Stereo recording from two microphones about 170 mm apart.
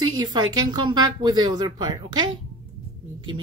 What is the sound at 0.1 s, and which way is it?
Speech, 25° right (ahead or behind).